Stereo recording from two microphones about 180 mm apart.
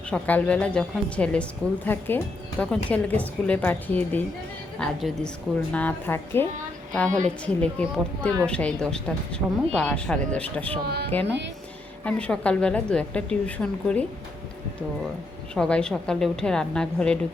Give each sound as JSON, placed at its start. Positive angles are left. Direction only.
{"t": 0.1, "sound": "a woman's voice", "side_deg": 5}
{"t": 10.8, "sound": "speech", "side_deg": -65}
{"t": 12.0, "sound": "a woman's voice", "side_deg": 5}
{"t": 15.5, "sound": "a woman's voice", "side_deg": 5}